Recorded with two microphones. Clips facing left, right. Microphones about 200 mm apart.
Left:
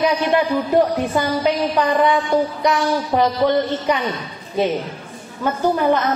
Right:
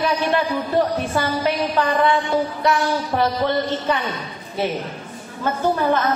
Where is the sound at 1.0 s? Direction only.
15° left (ahead or behind).